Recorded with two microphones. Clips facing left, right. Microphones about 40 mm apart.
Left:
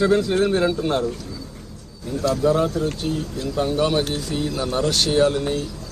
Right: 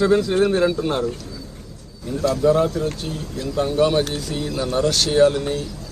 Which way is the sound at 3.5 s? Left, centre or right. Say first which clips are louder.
Right 2 dB; centre.